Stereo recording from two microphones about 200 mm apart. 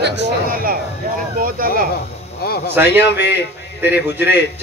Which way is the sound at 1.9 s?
50° left (ahead or behind).